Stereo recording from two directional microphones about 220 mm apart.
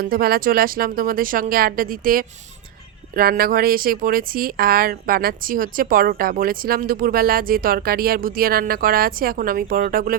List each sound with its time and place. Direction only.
0.0 s speech: 45° right (ahead or behind)